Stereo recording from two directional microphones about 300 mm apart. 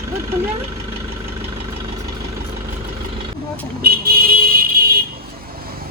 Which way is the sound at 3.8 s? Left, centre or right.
Right.